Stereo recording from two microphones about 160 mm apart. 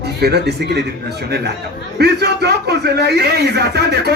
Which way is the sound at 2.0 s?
90° right.